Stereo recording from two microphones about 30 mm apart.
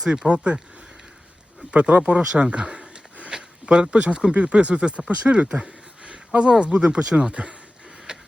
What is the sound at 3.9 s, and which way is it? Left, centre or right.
Speech, right.